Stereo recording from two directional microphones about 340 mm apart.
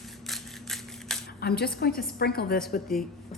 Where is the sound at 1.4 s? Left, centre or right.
Left.